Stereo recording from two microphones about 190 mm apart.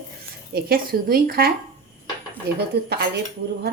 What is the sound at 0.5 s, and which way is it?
Speech, 50° right (ahead or behind).